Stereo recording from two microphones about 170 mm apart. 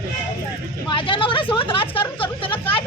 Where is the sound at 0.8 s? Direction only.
30° left (ahead or behind).